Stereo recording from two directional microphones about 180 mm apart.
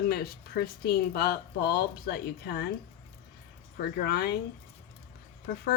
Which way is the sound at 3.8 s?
60° left (ahead or behind).